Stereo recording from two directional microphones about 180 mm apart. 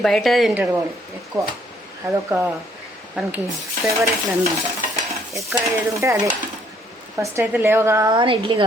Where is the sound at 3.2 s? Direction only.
5° right (ahead or behind).